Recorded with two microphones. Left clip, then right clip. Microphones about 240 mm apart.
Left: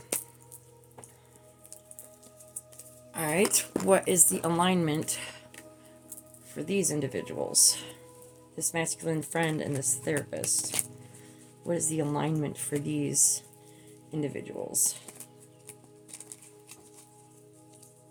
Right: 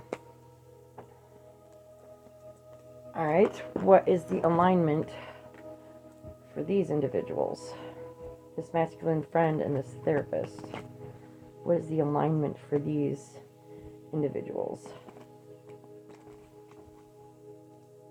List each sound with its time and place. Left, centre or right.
3.1 s speech: left
6.5 s speech: left
10.4 s speech: centre
11.6 s speech: left